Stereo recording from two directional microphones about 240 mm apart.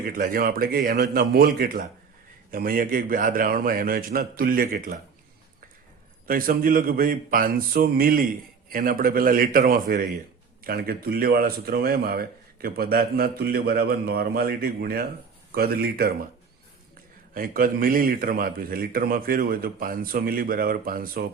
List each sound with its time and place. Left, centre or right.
0.0 s speech: right
6.2 s speech: right
17.3 s speech: right